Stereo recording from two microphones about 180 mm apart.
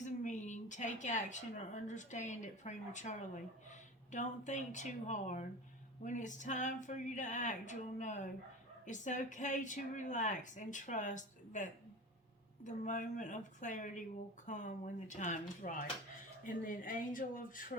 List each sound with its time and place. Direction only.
0.0 s a woman's voice: 40° left (ahead or behind)